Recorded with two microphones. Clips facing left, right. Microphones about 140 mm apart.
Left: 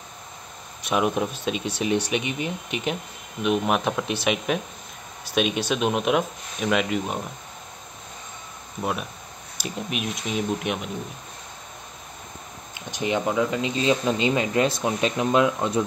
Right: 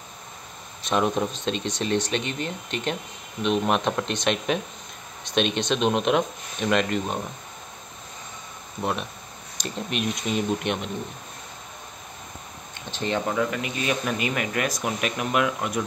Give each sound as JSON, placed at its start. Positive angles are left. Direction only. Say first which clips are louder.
{"t": 0.8, "sound": "speech", "louder": "even", "side_deg": 10}
{"t": 9.6, "sound": "speech", "louder": "right 1 dB", "side_deg": 5}
{"t": 12.7, "sound": "speech", "louder": "left 2 dB", "side_deg": 15}